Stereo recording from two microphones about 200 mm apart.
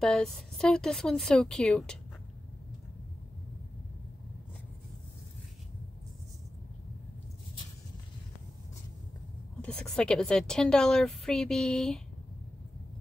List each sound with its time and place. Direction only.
0.0 s a woman's voice: 5° left (ahead or behind)
9.6 s a woman's voice: 5° left (ahead or behind)